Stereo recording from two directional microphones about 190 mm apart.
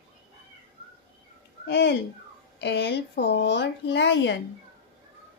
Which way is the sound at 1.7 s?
65° left (ahead or behind).